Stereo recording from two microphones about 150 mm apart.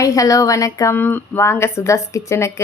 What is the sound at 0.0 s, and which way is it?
A woman's voice, 20° left (ahead or behind).